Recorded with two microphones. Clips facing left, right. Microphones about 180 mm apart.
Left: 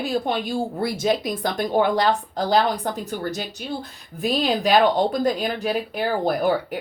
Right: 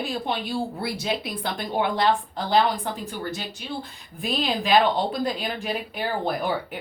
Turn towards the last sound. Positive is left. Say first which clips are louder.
# left 5 dB
turn(degrees=40)  # may be behind; listen again after turning